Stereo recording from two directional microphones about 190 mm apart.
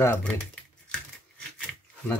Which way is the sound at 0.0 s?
10° left (ahead or behind).